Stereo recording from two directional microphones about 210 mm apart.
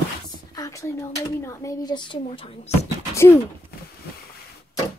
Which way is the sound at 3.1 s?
10° left (ahead or behind).